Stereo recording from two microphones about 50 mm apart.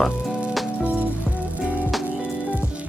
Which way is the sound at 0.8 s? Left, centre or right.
Right.